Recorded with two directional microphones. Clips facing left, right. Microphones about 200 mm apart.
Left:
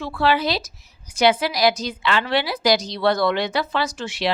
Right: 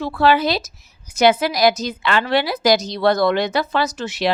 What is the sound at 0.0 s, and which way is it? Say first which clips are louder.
A woman's voice: right 4 dB; 45° right (ahead or behind).